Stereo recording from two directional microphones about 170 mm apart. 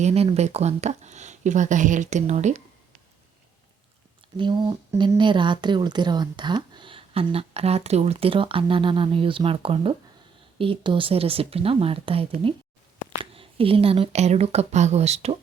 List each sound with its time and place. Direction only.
0.0 s speech: 35° right (ahead or behind)
4.4 s speech: 25° right (ahead or behind)